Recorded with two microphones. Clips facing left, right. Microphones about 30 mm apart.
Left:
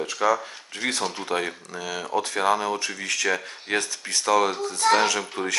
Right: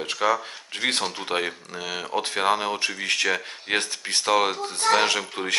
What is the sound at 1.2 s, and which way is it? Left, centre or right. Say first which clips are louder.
Speech: even; right.